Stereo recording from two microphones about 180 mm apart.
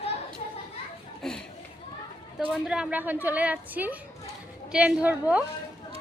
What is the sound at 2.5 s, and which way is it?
A woman's voice, 5° right (ahead or behind).